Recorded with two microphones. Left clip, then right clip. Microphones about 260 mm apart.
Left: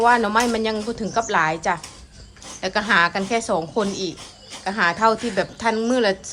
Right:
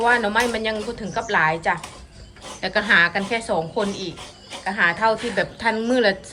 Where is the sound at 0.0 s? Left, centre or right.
Centre.